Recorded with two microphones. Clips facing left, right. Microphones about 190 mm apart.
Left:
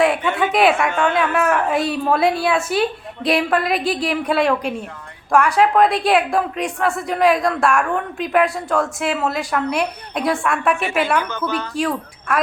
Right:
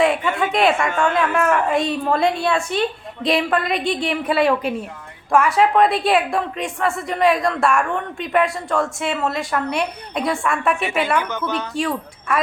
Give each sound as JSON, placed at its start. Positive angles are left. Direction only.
{"t": 0.0, "sound": "a woman's voice", "side_deg": 0}
{"t": 11.2, "sound": "a woman's voice", "side_deg": -20}
{"t": 11.7, "sound": "a woman's voice", "side_deg": 0}